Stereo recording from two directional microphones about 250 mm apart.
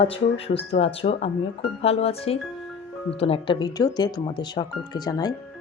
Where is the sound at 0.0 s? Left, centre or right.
Left.